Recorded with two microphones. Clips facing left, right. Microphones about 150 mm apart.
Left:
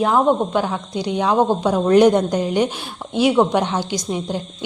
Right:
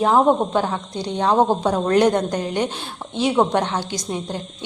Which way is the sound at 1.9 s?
15° left (ahead or behind).